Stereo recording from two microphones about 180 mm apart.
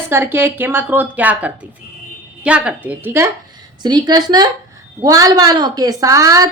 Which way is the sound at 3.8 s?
25° right (ahead or behind).